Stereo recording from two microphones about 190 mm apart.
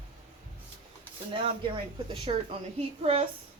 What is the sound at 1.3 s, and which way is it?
A woman's voice, 25° right (ahead or behind).